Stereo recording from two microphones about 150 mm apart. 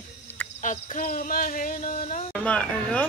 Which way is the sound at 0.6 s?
55° left (ahead or behind).